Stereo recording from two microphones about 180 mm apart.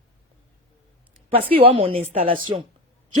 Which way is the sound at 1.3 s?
30° right (ahead or behind).